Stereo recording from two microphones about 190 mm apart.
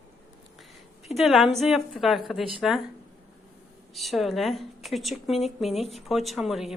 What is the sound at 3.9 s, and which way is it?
A woman's voice, centre (ahead or behind).